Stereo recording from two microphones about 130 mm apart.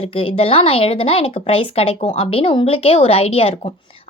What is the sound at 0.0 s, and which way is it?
A woman's voice, 45° left (ahead or behind).